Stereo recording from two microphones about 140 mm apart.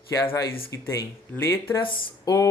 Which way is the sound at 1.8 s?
35° left (ahead or behind).